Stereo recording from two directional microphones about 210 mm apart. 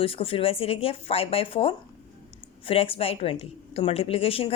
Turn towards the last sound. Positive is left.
turn(degrees=25)  # may be behind; listen again after turning